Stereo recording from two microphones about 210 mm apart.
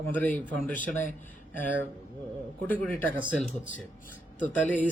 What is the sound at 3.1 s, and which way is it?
Speech, 5° right (ahead or behind).